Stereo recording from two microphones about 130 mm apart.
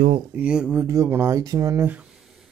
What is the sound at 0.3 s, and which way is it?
Speech, 10° right (ahead or behind).